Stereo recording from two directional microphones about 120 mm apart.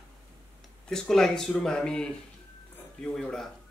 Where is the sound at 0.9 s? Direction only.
5° left (ahead or behind).